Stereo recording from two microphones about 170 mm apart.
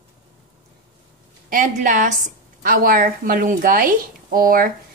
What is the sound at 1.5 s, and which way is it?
A woman's voice, 50° right (ahead or behind).